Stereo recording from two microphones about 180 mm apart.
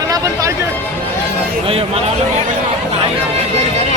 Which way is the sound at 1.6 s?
35° right (ahead or behind).